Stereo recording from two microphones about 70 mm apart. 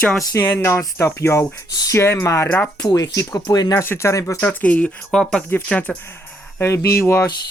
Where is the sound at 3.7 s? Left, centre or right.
Left.